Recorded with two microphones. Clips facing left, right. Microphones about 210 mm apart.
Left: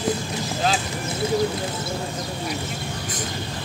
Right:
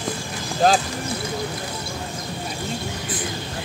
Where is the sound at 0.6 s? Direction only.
45° right (ahead or behind).